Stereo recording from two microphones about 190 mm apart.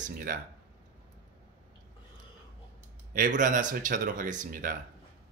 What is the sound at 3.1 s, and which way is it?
A man's voice, 45° right (ahead or behind).